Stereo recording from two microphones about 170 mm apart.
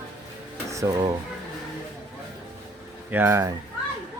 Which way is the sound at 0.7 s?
20° right (ahead or behind).